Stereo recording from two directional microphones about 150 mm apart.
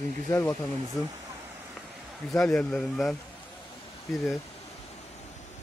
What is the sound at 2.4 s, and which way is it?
Speech, 5° left (ahead or behind).